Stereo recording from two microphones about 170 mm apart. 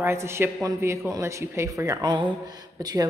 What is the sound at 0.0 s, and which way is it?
Speech, 15° right (ahead or behind).